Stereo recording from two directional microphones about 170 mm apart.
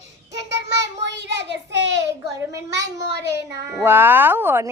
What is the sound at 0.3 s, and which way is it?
Child singing, 90° right.